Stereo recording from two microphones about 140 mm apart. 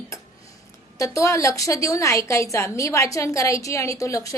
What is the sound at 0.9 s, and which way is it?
A woman's voice, 20° left (ahead or behind).